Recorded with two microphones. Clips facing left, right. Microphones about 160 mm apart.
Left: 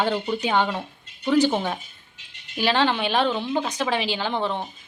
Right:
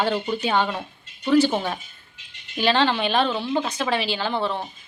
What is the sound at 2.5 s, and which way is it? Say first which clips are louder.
Speech: right 1 dB; 10° left (ahead or behind).